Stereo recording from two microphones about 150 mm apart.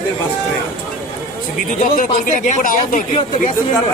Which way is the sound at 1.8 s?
60° left (ahead or behind).